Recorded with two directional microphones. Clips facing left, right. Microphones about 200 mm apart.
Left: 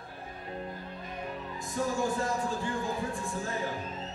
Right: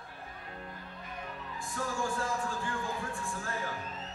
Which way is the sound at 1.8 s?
20° left (ahead or behind).